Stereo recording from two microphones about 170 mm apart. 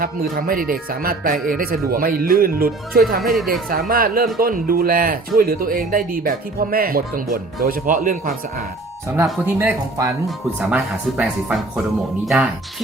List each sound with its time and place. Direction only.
0.0 s speech: 60° right (ahead or behind)
3.3 s speech: centre (ahead or behind)
3.7 s speech: 60° right (ahead or behind)
9.5 s speech: 10° right (ahead or behind)